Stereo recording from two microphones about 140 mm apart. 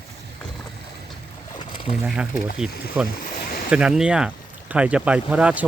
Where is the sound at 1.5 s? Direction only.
35° left (ahead or behind).